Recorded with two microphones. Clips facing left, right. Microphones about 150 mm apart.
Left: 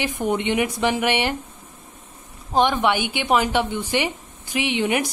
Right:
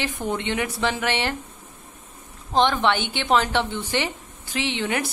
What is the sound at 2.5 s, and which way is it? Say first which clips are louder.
Speech: left 1 dB; 10° left (ahead or behind).